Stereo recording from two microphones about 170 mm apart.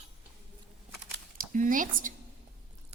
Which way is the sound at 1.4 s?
50° right (ahead or behind).